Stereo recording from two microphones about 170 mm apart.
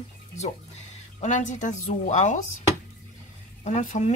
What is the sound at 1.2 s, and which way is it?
Speech, 45° left (ahead or behind).